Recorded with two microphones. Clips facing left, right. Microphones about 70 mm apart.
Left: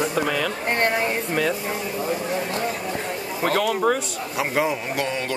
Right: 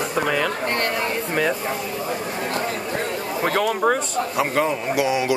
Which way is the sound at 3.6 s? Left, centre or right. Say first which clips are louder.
Right 2 dB; centre.